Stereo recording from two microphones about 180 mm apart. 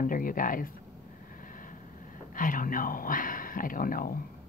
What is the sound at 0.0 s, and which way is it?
Speech, 50° left (ahead or behind).